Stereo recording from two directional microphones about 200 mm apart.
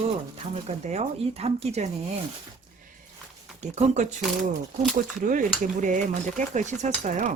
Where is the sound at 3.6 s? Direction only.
35° right (ahead or behind).